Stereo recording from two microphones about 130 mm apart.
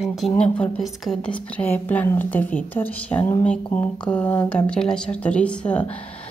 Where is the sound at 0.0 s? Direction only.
5° left (ahead or behind).